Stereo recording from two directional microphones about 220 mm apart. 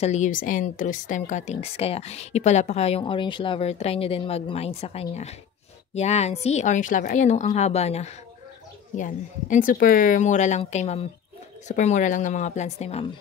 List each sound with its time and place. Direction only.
0.0 s a woman's voice: 30° left (ahead or behind)